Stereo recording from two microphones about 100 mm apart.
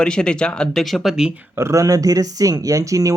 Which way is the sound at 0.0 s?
10° left (ahead or behind).